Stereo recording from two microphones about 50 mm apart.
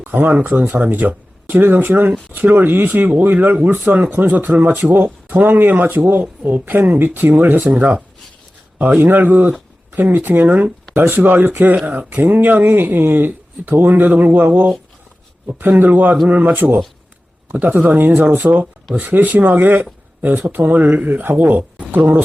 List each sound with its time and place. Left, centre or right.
0.0 s speech: right
9.0 s a man's voice: right